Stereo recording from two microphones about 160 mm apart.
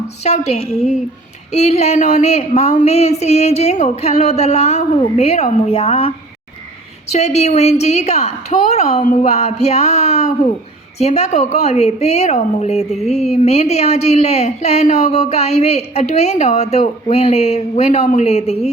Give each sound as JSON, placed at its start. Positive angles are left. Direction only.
{"t": 0.3, "sound": "a woman's voice", "side_deg": 45}
{"t": 9.0, "sound": "a sound", "side_deg": 45}
{"t": 10.9, "sound": "a woman's voice", "side_deg": 40}